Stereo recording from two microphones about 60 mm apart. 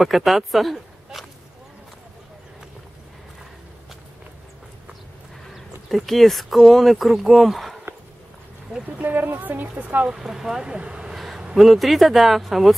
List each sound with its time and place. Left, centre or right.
0.0 s speech: centre
5.9 s speech: centre
8.8 s speech: right
10.0 s speech: centre